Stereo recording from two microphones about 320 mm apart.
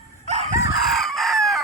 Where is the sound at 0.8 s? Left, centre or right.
Centre.